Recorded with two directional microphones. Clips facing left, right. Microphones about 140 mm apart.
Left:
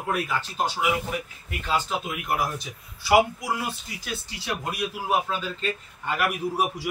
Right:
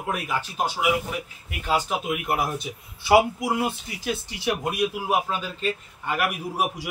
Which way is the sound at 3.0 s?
25° right (ahead or behind).